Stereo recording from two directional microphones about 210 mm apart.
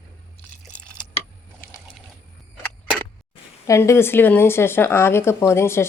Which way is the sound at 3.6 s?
15° left (ahead or behind).